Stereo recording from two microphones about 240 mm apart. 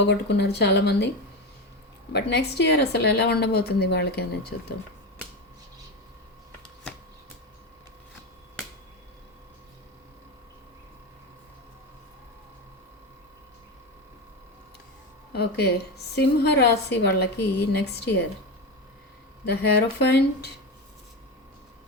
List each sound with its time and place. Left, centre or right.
0.0 s a woman's voice: left
2.1 s a woman's voice: left
15.3 s a woman's voice: left
19.5 s a woman's voice: left